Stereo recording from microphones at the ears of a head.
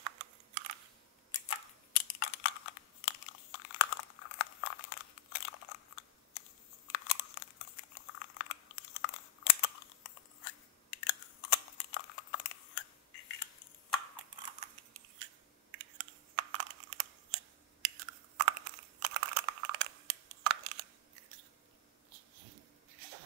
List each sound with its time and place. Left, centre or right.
0.0 s typing: right
1.3 s computer keyboard: left
6.9 s chewing: left
14.4 s typing: right
22.1 s a sound: right